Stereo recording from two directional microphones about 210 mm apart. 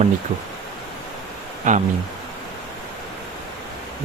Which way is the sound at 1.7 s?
35° right (ahead or behind).